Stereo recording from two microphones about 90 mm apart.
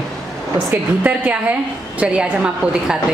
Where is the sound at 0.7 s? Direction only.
15° right (ahead or behind).